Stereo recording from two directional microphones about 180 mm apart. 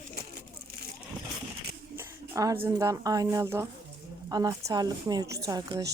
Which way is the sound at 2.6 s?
15° right (ahead or behind).